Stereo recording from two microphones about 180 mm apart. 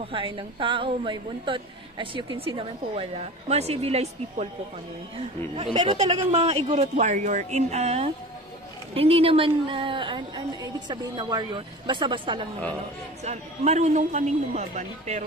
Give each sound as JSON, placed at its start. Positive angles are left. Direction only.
{"t": 0.0, "sound": "a woman's voice", "side_deg": -30}
{"t": 5.6, "sound": "a woman's voice", "side_deg": -25}
{"t": 13.2, "sound": "speech", "side_deg": -40}